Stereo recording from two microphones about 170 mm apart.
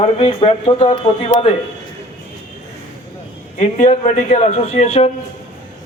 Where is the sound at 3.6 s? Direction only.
45° left (ahead or behind).